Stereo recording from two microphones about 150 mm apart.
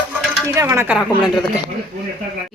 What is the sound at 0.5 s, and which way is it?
Speech, 20° right (ahead or behind).